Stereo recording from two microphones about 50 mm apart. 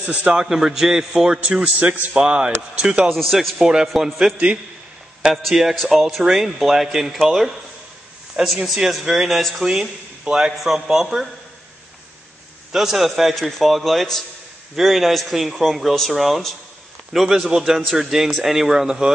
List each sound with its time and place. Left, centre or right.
0.2 s a man's voice: centre
1.6 s a man's voice: right
2.1 s a man's voice: centre
3.1 s speech: centre
3.5 s a man's voice: centre
8.4 s a man's voice: centre
9.7 s a man's voice: centre
12.7 s speech: centre